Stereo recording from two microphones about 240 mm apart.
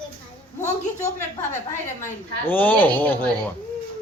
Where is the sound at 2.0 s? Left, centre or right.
Centre.